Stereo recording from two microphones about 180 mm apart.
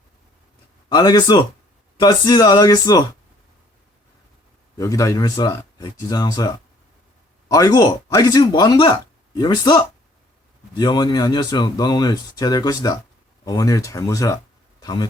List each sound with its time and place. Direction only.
0.9 s speech: 25° left (ahead or behind)
4.8 s speech: 15° left (ahead or behind)
14.8 s a sound: 20° left (ahead or behind)